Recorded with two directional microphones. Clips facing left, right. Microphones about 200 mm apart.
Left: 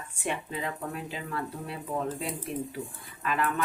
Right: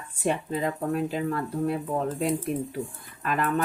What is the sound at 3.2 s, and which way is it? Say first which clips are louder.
Speech: right 2 dB; 45° right (ahead or behind).